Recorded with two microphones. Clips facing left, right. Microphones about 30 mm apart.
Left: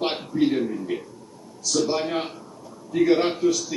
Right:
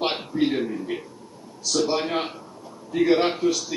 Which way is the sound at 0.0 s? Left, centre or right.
Centre.